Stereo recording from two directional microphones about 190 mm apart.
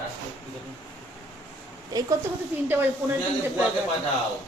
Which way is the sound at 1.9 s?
20° right (ahead or behind).